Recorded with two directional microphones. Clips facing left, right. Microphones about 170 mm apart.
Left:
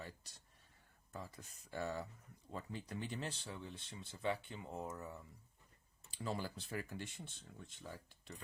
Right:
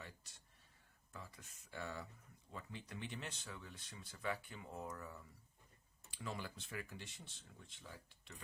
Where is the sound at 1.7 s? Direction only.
40° left (ahead or behind); by 5.2 s 25° left (ahead or behind).